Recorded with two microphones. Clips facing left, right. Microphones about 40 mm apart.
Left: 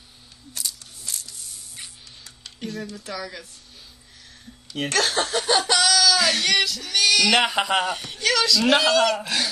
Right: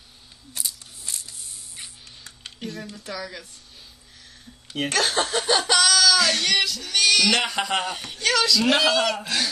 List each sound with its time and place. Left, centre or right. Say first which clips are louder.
0.6 s a sound: left 1 dB; centre
2.6 s speech: left 2 dB; centre
4.7 s speech: even; centre
7.7 s speech: left 3 dB; centre